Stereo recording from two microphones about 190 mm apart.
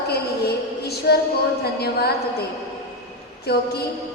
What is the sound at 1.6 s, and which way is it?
Speech, 55° left (ahead or behind).